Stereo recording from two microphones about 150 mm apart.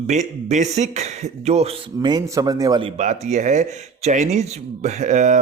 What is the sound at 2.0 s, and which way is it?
Speech, 25° right (ahead or behind).